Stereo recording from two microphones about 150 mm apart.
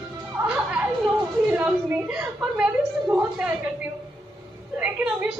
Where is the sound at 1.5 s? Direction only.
10° right (ahead or behind).